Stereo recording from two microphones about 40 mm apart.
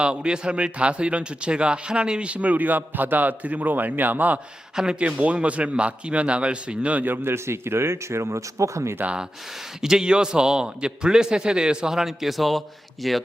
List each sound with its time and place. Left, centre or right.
0.0 s a man's voice: right
4.7 s speech: centre
4.9 s a man's voice: right
7.3 s speech: right
9.0 s a man's voice: right
9.8 s a man's voice: centre